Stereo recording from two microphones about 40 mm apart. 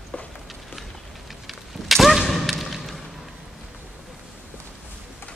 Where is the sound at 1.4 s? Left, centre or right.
Centre.